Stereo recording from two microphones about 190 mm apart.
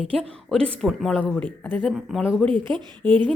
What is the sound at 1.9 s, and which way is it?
Speech, 5° right (ahead or behind).